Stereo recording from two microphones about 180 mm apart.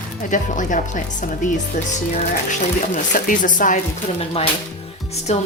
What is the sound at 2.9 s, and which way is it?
Speech, 45° left (ahead or behind).